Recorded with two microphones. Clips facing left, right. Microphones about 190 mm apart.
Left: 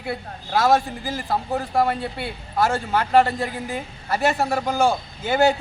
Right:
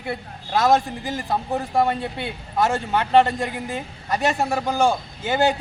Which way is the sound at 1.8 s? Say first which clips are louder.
Even; 20° right (ahead or behind).